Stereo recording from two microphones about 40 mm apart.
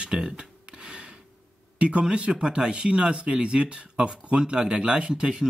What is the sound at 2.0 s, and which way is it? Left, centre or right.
Speech, right.